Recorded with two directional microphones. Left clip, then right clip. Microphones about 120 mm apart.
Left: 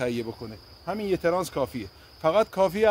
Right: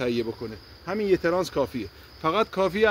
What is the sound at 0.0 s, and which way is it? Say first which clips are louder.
Speech: right 2 dB; 55° left (ahead or behind).